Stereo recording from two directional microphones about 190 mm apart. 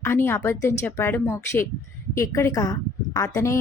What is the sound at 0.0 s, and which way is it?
A woman's voice, 15° left (ahead or behind).